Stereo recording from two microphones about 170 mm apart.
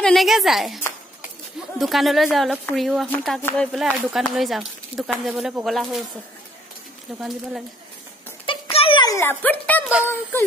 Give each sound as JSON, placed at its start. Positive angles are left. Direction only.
{"t": 0.0, "sound": "a woman's voice", "side_deg": 0}
{"t": 1.8, "sound": "speech", "side_deg": 0}
{"t": 7.2, "sound": "speech", "side_deg": 0}
{"t": 8.5, "sound": "a sound", "side_deg": 35}